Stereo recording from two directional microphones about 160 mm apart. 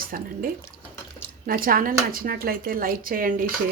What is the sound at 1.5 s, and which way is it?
Speech, 60° right (ahead or behind).